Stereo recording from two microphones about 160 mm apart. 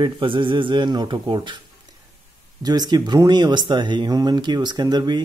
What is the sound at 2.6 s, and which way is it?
Speech, 25° right (ahead or behind).